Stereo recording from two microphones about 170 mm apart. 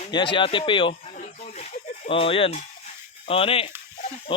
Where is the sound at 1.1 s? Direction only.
45° left (ahead or behind).